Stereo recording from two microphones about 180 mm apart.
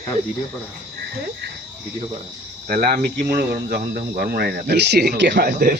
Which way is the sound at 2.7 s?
55° right (ahead or behind).